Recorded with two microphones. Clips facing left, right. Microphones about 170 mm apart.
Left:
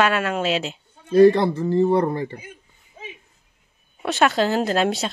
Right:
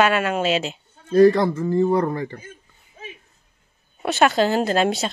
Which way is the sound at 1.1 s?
25° left (ahead or behind).